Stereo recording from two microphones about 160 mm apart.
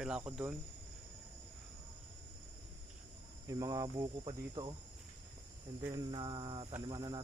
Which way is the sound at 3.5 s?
20° right (ahead or behind).